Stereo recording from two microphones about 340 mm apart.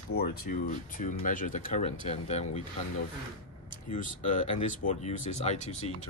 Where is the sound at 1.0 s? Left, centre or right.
Left.